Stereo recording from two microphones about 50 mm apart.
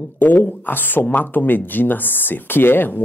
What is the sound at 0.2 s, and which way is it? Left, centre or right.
Speech, left.